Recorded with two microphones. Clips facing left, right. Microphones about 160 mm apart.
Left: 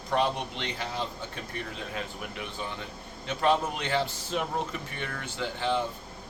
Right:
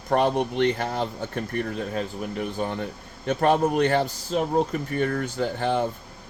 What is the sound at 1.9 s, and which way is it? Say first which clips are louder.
A man's voice: right 8 dB; 40° right (ahead or behind).